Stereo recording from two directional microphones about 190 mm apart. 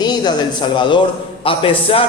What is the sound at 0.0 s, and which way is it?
A man's voice, 20° left (ahead or behind).